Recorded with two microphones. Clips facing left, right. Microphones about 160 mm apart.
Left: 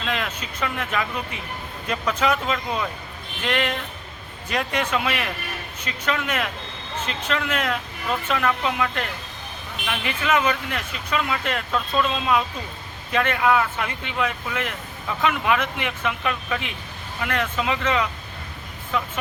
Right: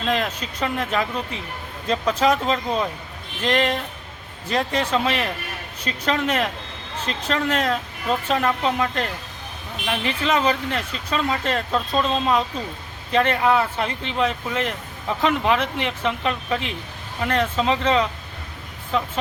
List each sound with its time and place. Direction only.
0.0 s speech: 40° right (ahead or behind)